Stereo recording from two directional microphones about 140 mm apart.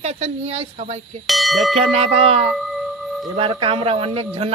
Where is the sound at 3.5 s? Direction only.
40° right (ahead or behind).